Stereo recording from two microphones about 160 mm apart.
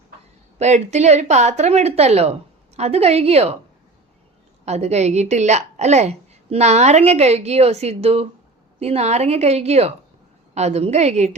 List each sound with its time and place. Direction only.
0.6 s a woman's voice: 45° right (ahead or behind)
4.6 s a woman's voice: 45° right (ahead or behind)